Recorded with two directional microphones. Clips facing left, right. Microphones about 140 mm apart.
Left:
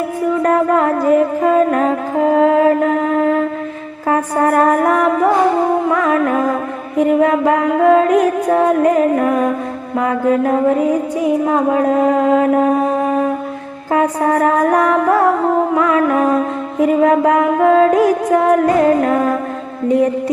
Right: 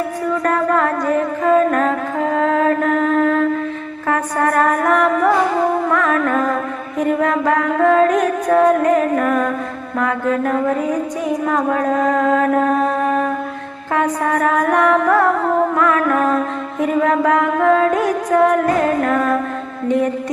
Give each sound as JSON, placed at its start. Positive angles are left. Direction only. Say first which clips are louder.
{"t": 0.4, "sound": "music", "louder": "left 3 dB", "side_deg": 25}
{"t": 4.1, "sound": "music", "louder": "left 3 dB", "side_deg": 30}
{"t": 5.9, "sound": "music", "louder": "left 2 dB", "side_deg": 20}
{"t": 7.0, "sound": "music", "louder": "left 4 dB", "side_deg": 25}
{"t": 10.1, "sound": "a sound", "louder": "left 5 dB", "side_deg": 30}
{"t": 13.9, "sound": "music", "louder": "left 3 dB", "side_deg": 35}
{"t": 15.7, "sound": "music", "louder": "left 2 dB", "side_deg": 20}
{"t": 16.9, "sound": "a sound", "louder": "left 3 dB", "side_deg": 30}
{"t": 17.4, "sound": "music", "louder": "left 3 dB", "side_deg": 30}
{"t": 18.8, "sound": "a sound", "louder": "left 4 dB", "side_deg": 25}